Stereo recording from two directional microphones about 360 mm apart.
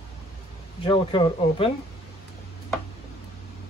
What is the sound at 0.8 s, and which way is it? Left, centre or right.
Speech, centre.